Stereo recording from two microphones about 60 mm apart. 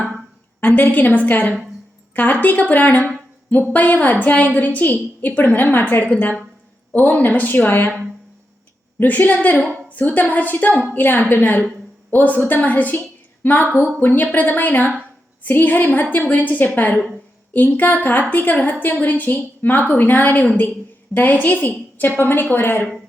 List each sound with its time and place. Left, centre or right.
0.6 s a woman's voice: left
9.0 s a woman's voice: left